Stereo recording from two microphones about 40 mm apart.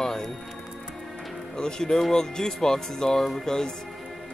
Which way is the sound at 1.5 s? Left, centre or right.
Centre.